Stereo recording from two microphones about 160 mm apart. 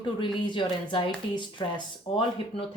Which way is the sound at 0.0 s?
30° left (ahead or behind).